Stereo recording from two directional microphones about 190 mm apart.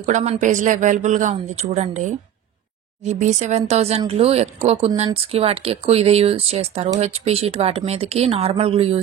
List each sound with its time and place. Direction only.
0.0 s speech: 40° right (ahead or behind)